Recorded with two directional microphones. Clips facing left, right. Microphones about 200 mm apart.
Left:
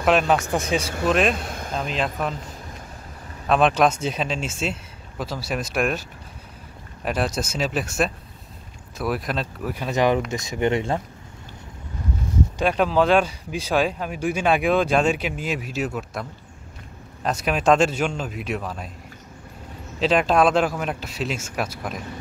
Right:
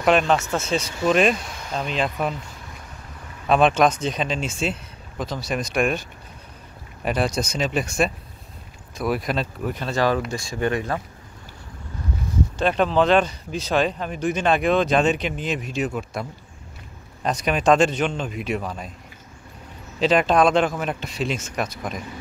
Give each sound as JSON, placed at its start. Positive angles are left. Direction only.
{"t": 0.0, "sound": "speech", "side_deg": 5}
{"t": 0.5, "sound": "speech", "side_deg": 15}
{"t": 1.0, "sound": "speech", "side_deg": 0}
{"t": 1.4, "sound": "a sound", "side_deg": 55}
{"t": 1.7, "sound": "speech", "side_deg": 0}
{"t": 3.4, "sound": "speech", "side_deg": 0}
{"t": 7.1, "sound": "speech", "side_deg": 0}
{"t": 9.8, "sound": "speech", "side_deg": 20}
{"t": 12.5, "sound": "speech", "side_deg": 5}
{"t": 20.0, "sound": "speech", "side_deg": 0}